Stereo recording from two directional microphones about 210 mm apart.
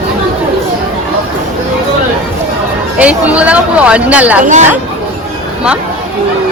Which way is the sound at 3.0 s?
5° right (ahead or behind).